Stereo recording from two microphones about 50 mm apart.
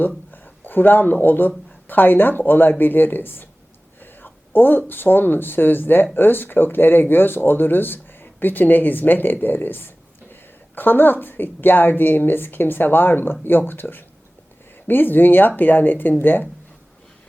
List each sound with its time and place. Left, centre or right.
0.3 s a woman's voice: left